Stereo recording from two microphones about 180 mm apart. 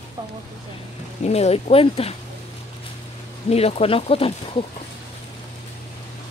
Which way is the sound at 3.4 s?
35° left (ahead or behind).